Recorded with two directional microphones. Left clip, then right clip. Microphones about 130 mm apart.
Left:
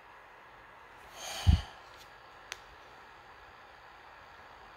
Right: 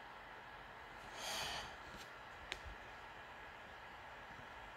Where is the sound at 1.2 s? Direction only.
15° left (ahead or behind).